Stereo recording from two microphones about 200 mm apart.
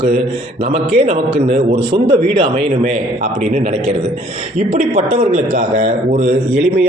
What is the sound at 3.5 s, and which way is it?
A man's voice, 40° right (ahead or behind).